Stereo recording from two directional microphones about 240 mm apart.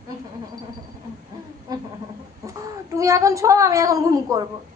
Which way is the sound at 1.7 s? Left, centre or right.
Centre.